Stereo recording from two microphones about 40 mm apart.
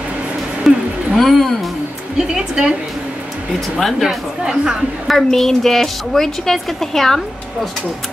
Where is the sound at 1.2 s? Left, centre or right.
Centre.